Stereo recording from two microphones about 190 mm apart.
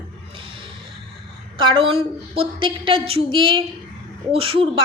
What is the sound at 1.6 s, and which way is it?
A woman's voice, 25° right (ahead or behind).